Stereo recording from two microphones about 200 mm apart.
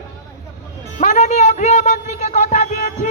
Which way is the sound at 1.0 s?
35° left (ahead or behind).